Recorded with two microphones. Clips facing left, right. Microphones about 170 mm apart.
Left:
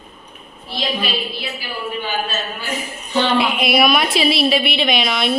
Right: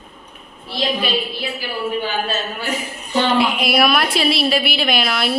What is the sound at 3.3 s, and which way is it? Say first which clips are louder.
A woman's voice: left 1 dB; centre (ahead or behind).